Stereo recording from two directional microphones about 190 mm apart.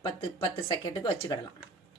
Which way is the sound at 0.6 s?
25° left (ahead or behind).